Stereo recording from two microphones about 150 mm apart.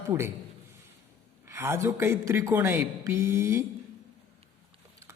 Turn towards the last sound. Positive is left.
turn(degrees=-20)  # may be behind; listen again after turning